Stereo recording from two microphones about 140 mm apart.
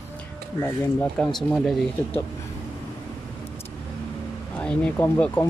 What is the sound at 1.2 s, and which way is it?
Speech, 5° left (ahead or behind).